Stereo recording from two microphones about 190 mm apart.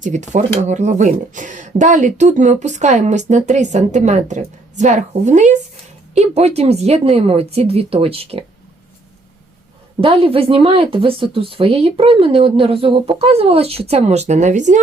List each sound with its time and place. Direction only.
0.0 s speech: 40° right (ahead or behind)
10.0 s speech: 30° right (ahead or behind)